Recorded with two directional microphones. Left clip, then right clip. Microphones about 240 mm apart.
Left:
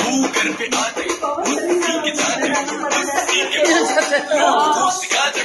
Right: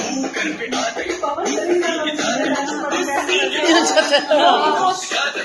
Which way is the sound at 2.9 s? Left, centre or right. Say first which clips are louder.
Left 1 dB; left.